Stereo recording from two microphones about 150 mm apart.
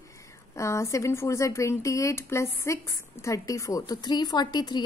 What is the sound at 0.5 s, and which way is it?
A woman's voice, 20° left (ahead or behind).